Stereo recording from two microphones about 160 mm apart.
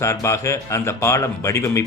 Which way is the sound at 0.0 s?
20° left (ahead or behind).